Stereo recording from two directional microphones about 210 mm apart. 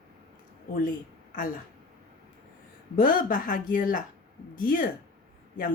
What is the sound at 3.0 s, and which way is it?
A woman's voice, 40° left (ahead or behind).